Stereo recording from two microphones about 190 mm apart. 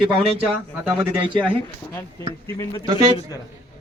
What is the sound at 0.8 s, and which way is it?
Speech, 10° right (ahead or behind).